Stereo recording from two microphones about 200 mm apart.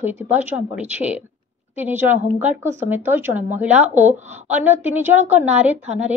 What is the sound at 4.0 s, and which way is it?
Speech, 35° right (ahead or behind).